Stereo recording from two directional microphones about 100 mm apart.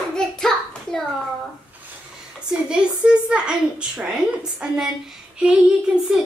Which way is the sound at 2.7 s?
10° right (ahead or behind).